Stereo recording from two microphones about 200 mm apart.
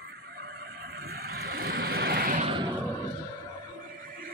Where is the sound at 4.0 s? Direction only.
45° right (ahead or behind).